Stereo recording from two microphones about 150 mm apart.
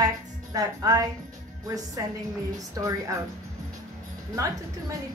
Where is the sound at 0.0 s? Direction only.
25° right (ahead or behind).